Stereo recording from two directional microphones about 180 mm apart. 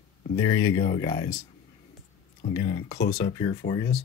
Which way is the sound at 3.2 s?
30° left (ahead or behind).